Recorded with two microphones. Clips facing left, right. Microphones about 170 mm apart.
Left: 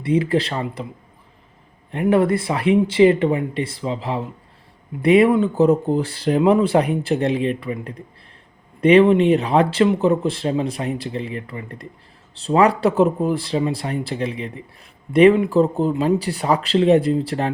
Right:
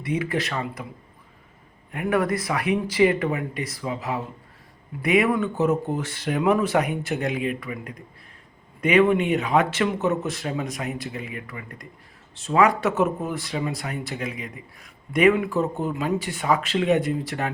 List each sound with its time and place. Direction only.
0.0 s speech: 30° left (ahead or behind)
1.9 s speech: 30° left (ahead or behind)